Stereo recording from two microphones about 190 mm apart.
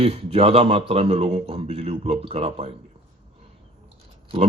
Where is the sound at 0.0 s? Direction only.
35° right (ahead or behind).